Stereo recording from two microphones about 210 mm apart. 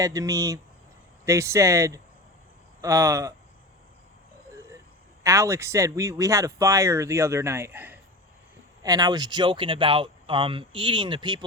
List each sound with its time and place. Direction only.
0.0 s speech: 15° right (ahead or behind)
5.2 s speech: 15° right (ahead or behind)